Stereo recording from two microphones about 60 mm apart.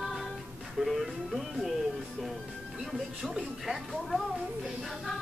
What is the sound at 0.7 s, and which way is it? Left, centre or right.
Music, centre.